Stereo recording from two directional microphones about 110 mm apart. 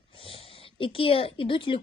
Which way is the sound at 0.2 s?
60° left (ahead or behind).